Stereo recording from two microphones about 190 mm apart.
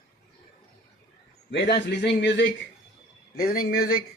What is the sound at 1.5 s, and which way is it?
Speech, 65° left (ahead or behind).